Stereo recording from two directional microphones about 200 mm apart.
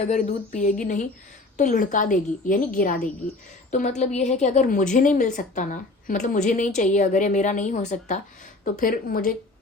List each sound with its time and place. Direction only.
0.1 s a woman's voice: 40° left (ahead or behind)